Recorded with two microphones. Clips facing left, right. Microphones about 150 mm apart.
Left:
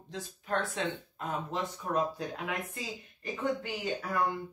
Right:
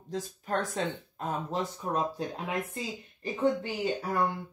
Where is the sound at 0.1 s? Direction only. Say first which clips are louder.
Right 2 dB; 40° right (ahead or behind).